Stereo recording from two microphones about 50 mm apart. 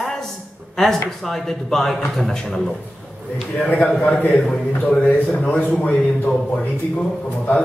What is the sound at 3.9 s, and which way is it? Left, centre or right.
A man's voice, left.